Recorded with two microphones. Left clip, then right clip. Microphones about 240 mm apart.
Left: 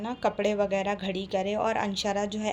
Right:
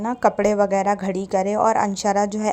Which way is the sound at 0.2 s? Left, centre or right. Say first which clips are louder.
Right 9 dB; centre.